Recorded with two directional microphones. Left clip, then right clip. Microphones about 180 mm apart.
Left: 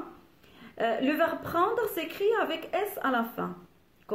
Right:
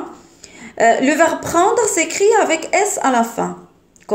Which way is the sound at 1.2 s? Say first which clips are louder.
Right 12 dB; 15° right (ahead or behind).